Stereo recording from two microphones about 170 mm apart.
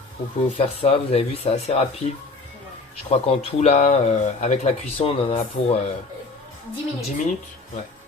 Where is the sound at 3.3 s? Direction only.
40° left (ahead or behind).